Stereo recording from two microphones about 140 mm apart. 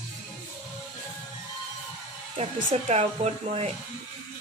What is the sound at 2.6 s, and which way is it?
Speech, 50° right (ahead or behind).